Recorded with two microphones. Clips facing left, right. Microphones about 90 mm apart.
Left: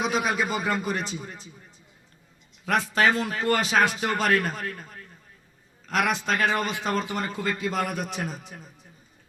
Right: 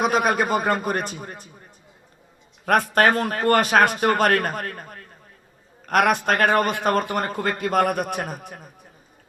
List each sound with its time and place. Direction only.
0.0 s a man's voice: 50° right (ahead or behind)
2.6 s a man's voice: 55° right (ahead or behind)